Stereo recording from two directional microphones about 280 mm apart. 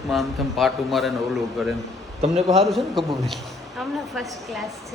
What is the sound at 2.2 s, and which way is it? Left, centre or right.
Speech, right.